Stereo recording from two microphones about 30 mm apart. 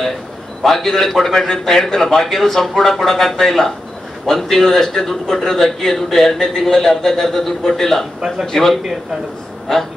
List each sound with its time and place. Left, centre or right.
0.6 s a man's voice: centre